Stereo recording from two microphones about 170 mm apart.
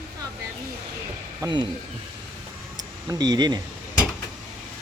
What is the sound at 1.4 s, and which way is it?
Speech, 25° right (ahead or behind).